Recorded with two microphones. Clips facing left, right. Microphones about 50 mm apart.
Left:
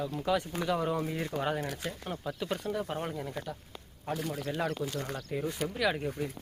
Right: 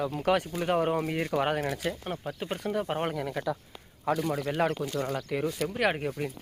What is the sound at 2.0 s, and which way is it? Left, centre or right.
Speech, right.